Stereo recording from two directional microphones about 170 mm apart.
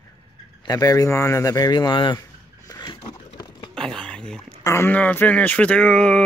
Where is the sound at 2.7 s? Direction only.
25° left (ahead or behind).